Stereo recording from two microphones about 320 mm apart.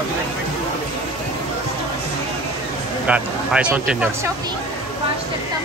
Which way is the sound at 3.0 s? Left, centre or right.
Centre.